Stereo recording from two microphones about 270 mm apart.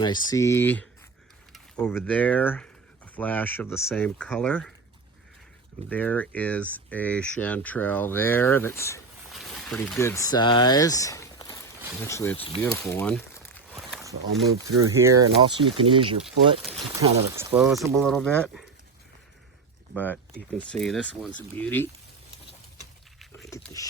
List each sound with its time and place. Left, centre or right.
0.0 s speech: centre
5.9 s speech: centre
13.7 s a sound: centre
14.8 s speech: centre
17.3 s speech: centre
19.9 s speech: centre
23.3 s a sound: centre